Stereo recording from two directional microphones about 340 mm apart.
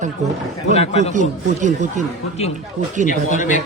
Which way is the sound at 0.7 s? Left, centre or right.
Centre.